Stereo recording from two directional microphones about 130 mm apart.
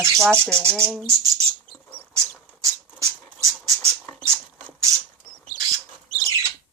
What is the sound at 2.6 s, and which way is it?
Squawk, 25° right (ahead or behind).